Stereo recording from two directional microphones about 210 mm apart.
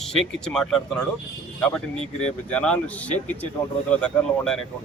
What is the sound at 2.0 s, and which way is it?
Speech, 30° left (ahead or behind).